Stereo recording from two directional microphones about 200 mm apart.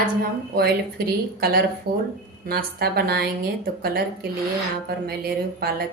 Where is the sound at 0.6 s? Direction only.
50° right (ahead or behind).